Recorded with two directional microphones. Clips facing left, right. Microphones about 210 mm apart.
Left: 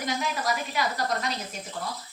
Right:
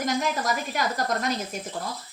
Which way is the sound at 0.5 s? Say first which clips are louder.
Right 2 dB; 45° right (ahead or behind).